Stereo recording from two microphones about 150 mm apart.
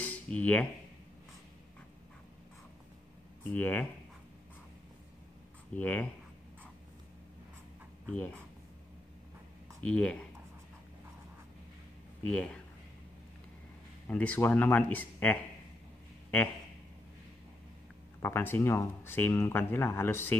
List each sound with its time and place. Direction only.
0.0 s a sound: 10° left (ahead or behind)
3.4 s speech: 10° left (ahead or behind)
5.8 s speech: 10° left (ahead or behind)
8.1 s speech: 10° left (ahead or behind)
9.8 s speech: 10° left (ahead or behind)
12.3 s speech: 5° left (ahead or behind)
14.0 s speech: 10° left (ahead or behind)
18.2 s speech: 15° left (ahead or behind)